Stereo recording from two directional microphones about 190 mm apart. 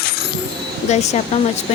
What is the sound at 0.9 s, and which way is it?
Speech, 35° left (ahead or behind).